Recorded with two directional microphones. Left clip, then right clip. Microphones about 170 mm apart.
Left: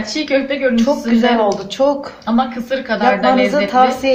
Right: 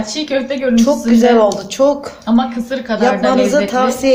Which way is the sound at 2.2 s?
40° left (ahead or behind).